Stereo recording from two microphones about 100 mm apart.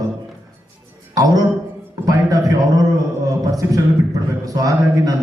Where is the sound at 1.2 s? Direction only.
40° right (ahead or behind).